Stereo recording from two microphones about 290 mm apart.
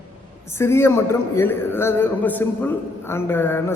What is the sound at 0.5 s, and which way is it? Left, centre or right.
A man's voice, centre.